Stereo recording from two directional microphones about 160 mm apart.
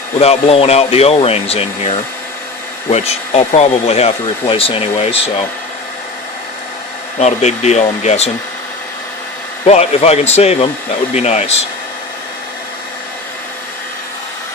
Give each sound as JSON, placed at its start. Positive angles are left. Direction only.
{"t": 0.2, "sound": "speech", "side_deg": 40}
{"t": 7.2, "sound": "speech", "side_deg": 45}
{"t": 9.6, "sound": "speech", "side_deg": 40}